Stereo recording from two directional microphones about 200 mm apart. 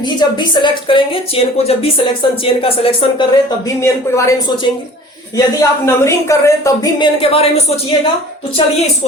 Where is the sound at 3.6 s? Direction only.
15° left (ahead or behind).